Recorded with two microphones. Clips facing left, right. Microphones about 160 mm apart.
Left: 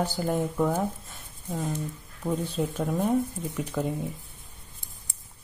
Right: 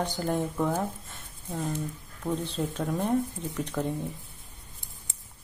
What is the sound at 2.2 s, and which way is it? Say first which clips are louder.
Speech: left 2 dB; 5° left (ahead or behind).